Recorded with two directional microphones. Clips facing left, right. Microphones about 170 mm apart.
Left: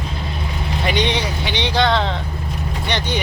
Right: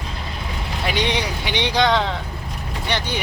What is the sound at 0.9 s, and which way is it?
Speech, 10° right (ahead or behind).